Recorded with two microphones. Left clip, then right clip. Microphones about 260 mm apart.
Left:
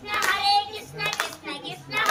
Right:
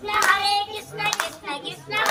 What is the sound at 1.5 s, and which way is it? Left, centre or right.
Hands, centre.